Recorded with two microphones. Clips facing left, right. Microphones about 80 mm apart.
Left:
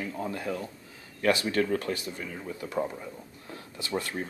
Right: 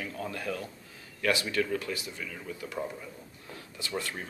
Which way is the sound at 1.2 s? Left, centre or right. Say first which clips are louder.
Left 3 dB; left.